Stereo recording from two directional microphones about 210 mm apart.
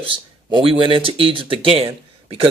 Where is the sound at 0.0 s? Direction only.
25° right (ahead or behind).